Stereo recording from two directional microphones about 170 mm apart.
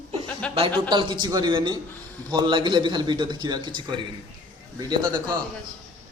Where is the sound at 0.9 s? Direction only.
25° right (ahead or behind).